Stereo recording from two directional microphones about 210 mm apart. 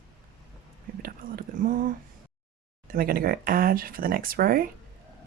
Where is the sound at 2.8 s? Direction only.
45° right (ahead or behind).